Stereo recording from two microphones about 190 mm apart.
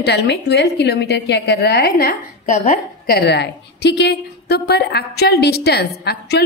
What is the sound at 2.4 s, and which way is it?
Speech, 40° left (ahead or behind).